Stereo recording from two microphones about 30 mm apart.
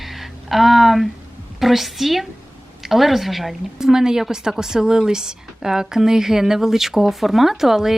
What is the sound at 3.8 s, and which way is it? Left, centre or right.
A woman's voice, centre.